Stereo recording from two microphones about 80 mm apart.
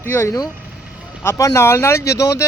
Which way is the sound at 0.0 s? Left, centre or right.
Left.